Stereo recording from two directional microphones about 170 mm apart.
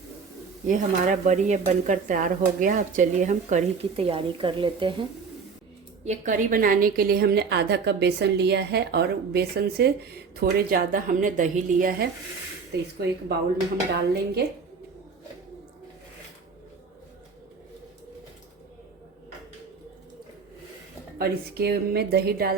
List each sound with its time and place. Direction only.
0.7 s speech: 45° right (ahead or behind); by 4.9 s 30° right (ahead or behind)
6.1 s a woman's voice: 50° right (ahead or behind)
12.7 s a woman's voice: 75° right (ahead or behind)
13.9 s a woman's voice: 70° right (ahead or behind)
21.2 s a woman's voice: 70° right (ahead or behind)